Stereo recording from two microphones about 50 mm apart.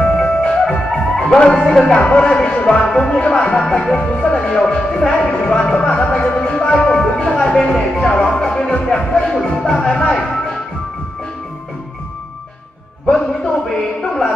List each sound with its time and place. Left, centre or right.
0.0 s music: centre
0.9 s music: centre
1.4 s speech: centre
2.1 s speech: left
4.0 s speech: left
6.2 s music: left
7.4 s speech: centre
13.0 s a man's voice: left
13.7 s speech: centre